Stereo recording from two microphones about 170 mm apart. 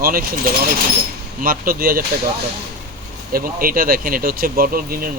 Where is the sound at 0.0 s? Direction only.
60° right (ahead or behind).